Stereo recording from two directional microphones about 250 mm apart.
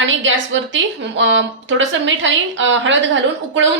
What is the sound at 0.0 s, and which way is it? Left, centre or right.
A woman's voice, right.